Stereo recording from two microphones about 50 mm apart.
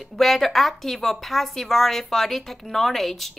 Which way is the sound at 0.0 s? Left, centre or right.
Centre.